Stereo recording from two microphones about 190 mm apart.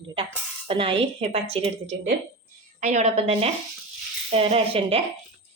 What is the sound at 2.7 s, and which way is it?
A woman's voice, 35° right (ahead or behind).